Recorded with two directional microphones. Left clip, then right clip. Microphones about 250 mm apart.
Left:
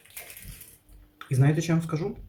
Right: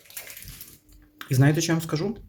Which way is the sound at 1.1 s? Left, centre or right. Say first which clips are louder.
Right 4 dB; right.